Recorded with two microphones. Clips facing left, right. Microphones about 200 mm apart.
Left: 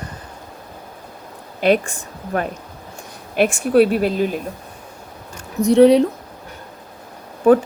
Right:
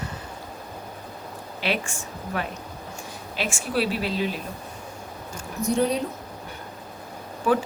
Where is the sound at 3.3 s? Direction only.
60° left (ahead or behind).